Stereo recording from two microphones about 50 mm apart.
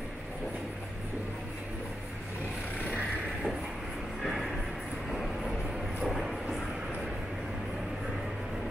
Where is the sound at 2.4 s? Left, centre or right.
Left.